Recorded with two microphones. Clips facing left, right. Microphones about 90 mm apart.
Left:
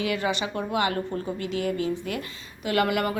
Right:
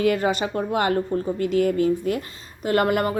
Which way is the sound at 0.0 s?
45° right (ahead or behind).